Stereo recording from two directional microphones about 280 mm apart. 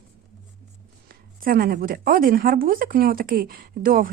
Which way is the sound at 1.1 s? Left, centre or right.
Right.